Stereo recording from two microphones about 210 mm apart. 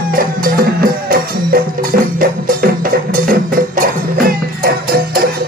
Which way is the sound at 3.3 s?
40° right (ahead or behind).